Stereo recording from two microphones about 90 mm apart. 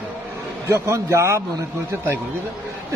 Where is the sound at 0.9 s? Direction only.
30° right (ahead or behind).